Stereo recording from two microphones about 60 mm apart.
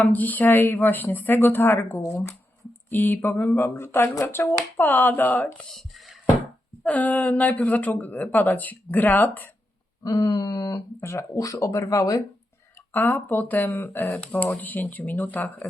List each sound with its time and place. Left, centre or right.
0.0 s speech: left
2.9 s speech: left
6.8 s speech: left
10.0 s a sound: left
11.0 s speech: left
11.3 s speech: left
12.9 s speech: left
14.1 s speech: left